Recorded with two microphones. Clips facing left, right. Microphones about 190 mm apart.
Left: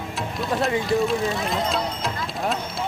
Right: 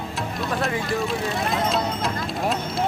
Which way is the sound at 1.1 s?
Centre (ahead or behind).